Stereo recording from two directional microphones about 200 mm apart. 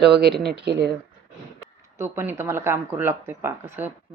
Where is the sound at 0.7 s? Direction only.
55° right (ahead or behind).